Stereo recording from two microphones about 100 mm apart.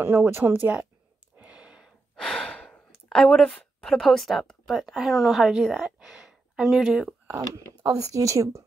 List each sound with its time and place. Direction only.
0.0 s speech: 20° right (ahead or behind)
1.4 s a sound: 10° right (ahead or behind)
2.1 s breathing: 5° left (ahead or behind)
3.1 s speech: 5° left (ahead or behind)
8.0 s speech: 35° right (ahead or behind)